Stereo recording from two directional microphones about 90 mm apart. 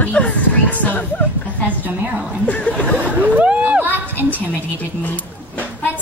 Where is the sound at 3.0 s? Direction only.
15° right (ahead or behind).